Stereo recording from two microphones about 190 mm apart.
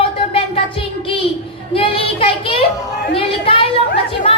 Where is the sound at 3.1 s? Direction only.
30° left (ahead or behind).